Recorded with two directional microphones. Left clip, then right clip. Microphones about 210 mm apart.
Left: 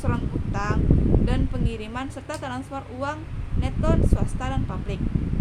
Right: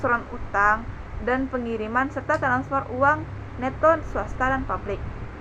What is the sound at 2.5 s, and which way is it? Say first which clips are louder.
Speech: right 9 dB; 15° left (ahead or behind).